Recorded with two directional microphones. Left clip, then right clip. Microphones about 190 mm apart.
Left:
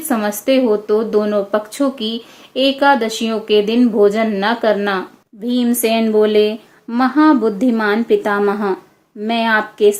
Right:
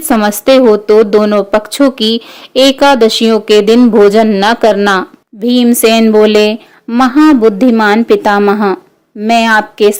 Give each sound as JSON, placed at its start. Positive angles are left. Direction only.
{"t": 0.1, "sound": "speech", "side_deg": -55}